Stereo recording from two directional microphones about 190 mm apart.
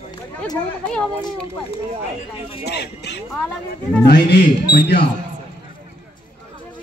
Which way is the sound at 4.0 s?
60° left (ahead or behind).